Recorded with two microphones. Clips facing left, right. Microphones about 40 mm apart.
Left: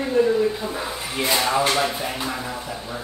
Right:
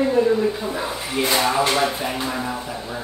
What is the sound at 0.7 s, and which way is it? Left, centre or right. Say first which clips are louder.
A woman's voice: right 3 dB; centre.